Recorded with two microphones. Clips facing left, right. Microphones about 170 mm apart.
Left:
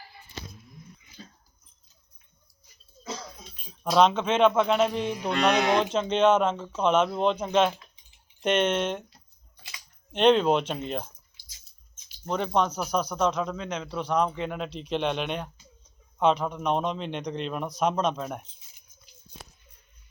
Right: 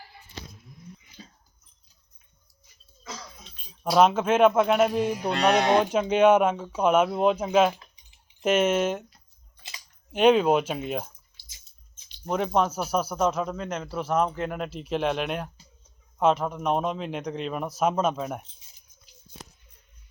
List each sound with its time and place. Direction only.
3.8 s speech: 5° right (ahead or behind)
5.3 s speech: 30° right (ahead or behind)
5.8 s speech: 10° right (ahead or behind)
10.1 s speech: 5° right (ahead or behind)
12.2 s speech: 5° right (ahead or behind)